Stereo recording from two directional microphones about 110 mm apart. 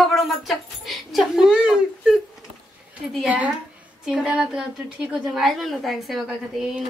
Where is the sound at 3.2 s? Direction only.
10° right (ahead or behind).